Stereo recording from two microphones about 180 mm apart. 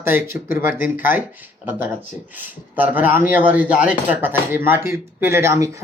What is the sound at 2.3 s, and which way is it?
Speech, 10° right (ahead or behind).